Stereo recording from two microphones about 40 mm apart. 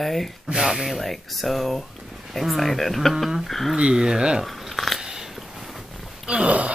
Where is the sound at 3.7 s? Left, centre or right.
Centre.